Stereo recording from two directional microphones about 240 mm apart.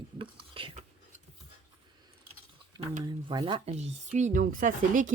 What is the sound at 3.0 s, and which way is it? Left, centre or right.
Speech, centre.